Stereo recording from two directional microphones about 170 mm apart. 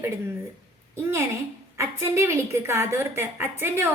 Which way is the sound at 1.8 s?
15° right (ahead or behind).